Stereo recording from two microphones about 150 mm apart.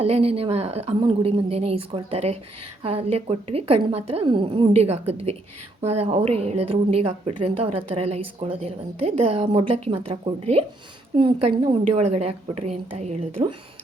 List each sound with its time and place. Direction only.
0.0 s a woman's voice: 45° right (ahead or behind)